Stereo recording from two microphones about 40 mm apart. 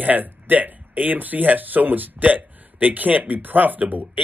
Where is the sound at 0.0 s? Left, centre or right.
Right.